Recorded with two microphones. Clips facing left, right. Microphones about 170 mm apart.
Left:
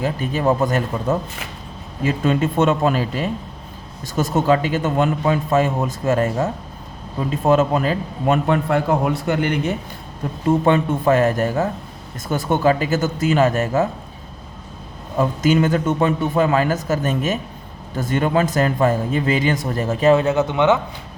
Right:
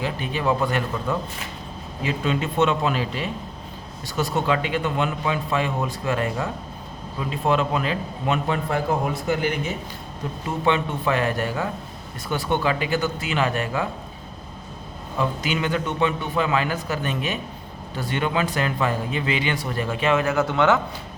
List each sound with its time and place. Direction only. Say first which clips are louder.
0.0 s speech: left 5 dB; 45° left (ahead or behind)
8.4 s a man's voice: left 5 dB; 60° left (ahead or behind)
10.7 s speech: left 3 dB; 45° left (ahead or behind)
15.2 s a man's voice: left 8 dB; 45° left (ahead or behind)
20.2 s speech: left 3 dB; 20° left (ahead or behind)